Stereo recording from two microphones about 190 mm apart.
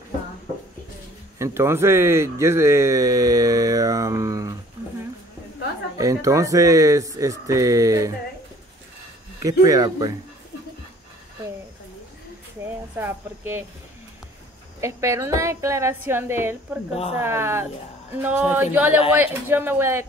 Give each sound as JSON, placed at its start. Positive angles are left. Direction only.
{"t": 1.4, "sound": "speech", "side_deg": -15}
{"t": 5.9, "sound": "speech", "side_deg": -15}
{"t": 9.4, "sound": "speech", "side_deg": -20}
{"t": 12.9, "sound": "speech", "side_deg": -10}
{"t": 14.8, "sound": "speech", "side_deg": -15}
{"t": 16.9, "sound": "speech", "side_deg": 30}
{"t": 17.2, "sound": "speech", "side_deg": -15}